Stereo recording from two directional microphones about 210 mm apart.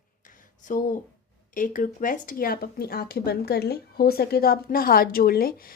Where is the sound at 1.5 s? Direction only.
40° left (ahead or behind).